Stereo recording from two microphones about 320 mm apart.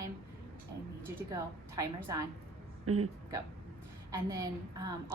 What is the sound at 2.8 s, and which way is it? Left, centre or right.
Speech, right.